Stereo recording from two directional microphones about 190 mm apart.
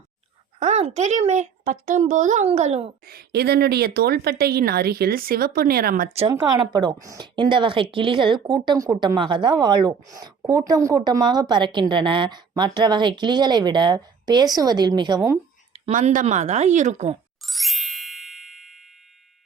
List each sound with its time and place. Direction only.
0.6 s a woman's voice: 35° right (ahead or behind)
3.0 s speech: 55° right (ahead or behind)
6.3 s a woman's voice: 20° right (ahead or behind)
15.7 s a woman's voice: 40° right (ahead or behind)
17.4 s ding: centre (ahead or behind)